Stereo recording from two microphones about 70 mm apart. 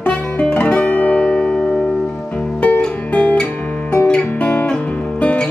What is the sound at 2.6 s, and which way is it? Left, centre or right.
Music, centre.